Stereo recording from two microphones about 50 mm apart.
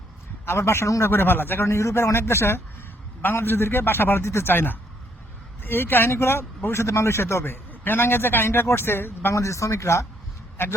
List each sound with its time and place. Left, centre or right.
0.4 s a man's voice: left
1.1 s speech: left
1.6 s a man's voice: left
3.2 s speech: left
6.8 s a man's voice: left
7.7 s a man's voice: left
9.3 s speech: left